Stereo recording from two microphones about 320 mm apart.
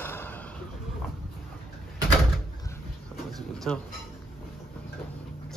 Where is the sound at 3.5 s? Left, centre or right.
Centre.